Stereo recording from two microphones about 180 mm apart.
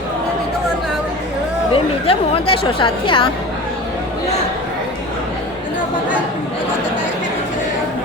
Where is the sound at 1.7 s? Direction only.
30° left (ahead or behind).